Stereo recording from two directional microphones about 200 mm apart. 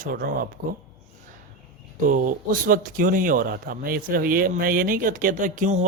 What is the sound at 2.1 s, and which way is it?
Speech, 40° right (ahead or behind).